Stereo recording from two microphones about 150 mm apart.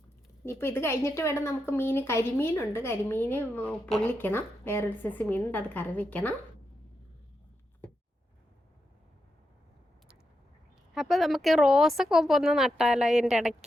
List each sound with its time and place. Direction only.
0.4 s a woman's voice: 15° left (ahead or behind)
4.0 s a woman's voice: 15° left (ahead or behind)
10.9 s speech: centre (ahead or behind)